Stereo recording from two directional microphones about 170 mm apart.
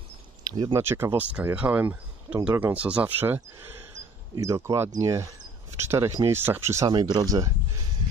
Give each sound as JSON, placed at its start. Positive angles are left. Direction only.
{"t": 0.4, "sound": "speech", "side_deg": -25}
{"t": 0.7, "sound": "speech", "side_deg": -15}